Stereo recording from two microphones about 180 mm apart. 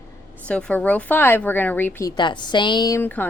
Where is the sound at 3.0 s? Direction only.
10° left (ahead or behind).